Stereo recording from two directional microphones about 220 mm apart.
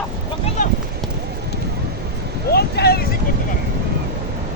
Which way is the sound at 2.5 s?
45° left (ahead or behind).